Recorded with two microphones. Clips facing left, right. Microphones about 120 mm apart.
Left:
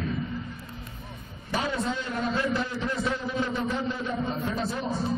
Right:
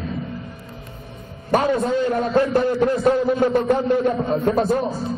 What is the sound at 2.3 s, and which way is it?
A man's voice, 50° right (ahead or behind).